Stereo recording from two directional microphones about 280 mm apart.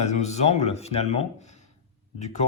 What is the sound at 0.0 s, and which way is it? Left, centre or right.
Speech, left.